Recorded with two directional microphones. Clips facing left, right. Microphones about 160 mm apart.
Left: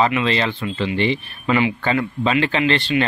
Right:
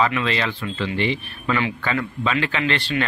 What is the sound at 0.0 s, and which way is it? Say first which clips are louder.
Speech: left 3 dB; 30° left (ahead or behind).